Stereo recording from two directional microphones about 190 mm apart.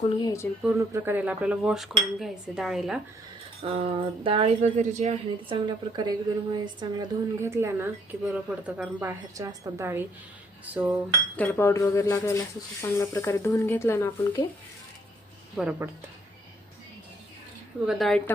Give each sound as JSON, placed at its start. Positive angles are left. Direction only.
{"t": 0.2, "sound": "speech", "side_deg": 20}
{"t": 0.8, "sound": "a woman's voice", "side_deg": -15}
{"t": 3.6, "sound": "speech", "side_deg": -30}
{"t": 5.6, "sound": "a woman's voice", "side_deg": -20}
{"t": 11.3, "sound": "speech", "side_deg": 10}
{"t": 15.5, "sound": "a woman's voice", "side_deg": -5}
{"t": 17.8, "sound": "speech", "side_deg": 0}